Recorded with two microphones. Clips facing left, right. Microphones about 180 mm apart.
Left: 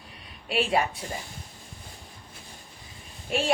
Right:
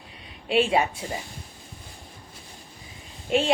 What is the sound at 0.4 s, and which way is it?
Speech, 25° right (ahead or behind).